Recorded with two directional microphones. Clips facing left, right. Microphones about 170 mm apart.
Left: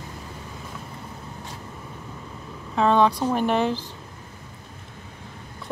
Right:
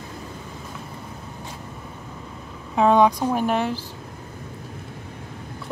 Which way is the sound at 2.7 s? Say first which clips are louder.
Right 2 dB; 15° right (ahead or behind).